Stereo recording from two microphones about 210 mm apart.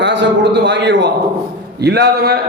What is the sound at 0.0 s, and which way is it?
A man's voice, 55° right (ahead or behind).